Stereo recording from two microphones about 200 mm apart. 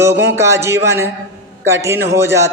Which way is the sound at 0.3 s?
15° right (ahead or behind).